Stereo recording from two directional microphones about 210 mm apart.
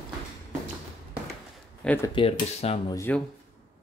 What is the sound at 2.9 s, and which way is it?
Speech, 10° left (ahead or behind).